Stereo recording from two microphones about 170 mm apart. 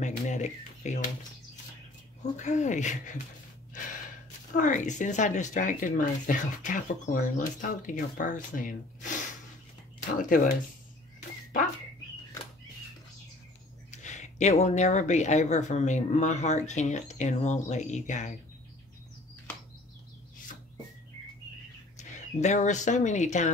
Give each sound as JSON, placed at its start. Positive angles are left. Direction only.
{"t": 0.0, "sound": "speech", "side_deg": 45}
{"t": 2.3, "sound": "speech", "side_deg": 45}
{"t": 4.6, "sound": "speech", "side_deg": 50}
{"t": 13.8, "sound": "speech", "side_deg": 45}
{"t": 21.9, "sound": "speech", "side_deg": 45}